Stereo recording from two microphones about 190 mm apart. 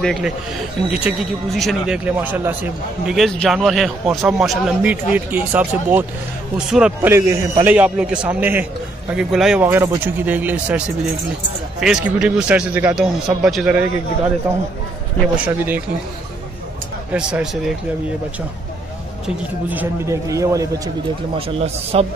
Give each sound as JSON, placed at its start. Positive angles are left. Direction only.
{"t": 0.0, "sound": "a man's voice", "side_deg": 0}
{"t": 11.8, "sound": "a man's voice", "side_deg": -5}
{"t": 17.1, "sound": "speech", "side_deg": -5}
{"t": 19.2, "sound": "a man's voice", "side_deg": -10}
{"t": 21.4, "sound": "speech", "side_deg": -30}